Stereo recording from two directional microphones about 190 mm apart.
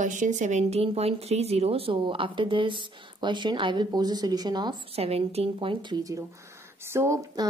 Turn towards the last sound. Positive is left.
turn(degrees=-15)  # may be behind; listen again after turning